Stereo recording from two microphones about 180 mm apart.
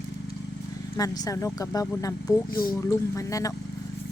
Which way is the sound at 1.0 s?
20° left (ahead or behind).